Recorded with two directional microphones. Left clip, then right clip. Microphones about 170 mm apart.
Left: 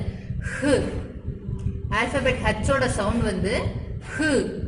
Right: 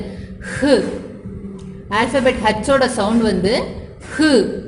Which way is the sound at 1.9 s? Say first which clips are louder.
Right 7 dB; 40° right (ahead or behind).